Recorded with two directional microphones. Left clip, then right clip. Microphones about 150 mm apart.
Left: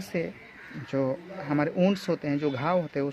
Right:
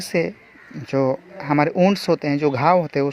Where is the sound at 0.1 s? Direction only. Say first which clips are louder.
Right 10 dB; 50° right (ahead or behind).